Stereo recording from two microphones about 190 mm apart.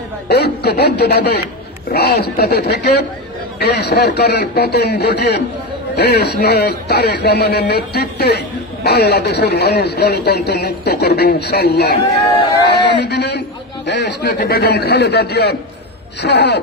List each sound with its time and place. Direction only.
0.3 s a man's voice: 60° left (ahead or behind)
13.0 s a man's voice: 60° left (ahead or behind)